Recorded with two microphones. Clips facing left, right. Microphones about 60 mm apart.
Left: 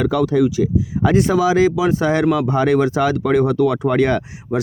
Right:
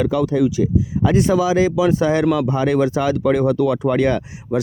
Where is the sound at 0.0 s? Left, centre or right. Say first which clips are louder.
Left 1 dB; left.